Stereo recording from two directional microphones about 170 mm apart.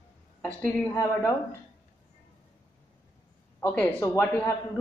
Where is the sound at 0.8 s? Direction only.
20° left (ahead or behind).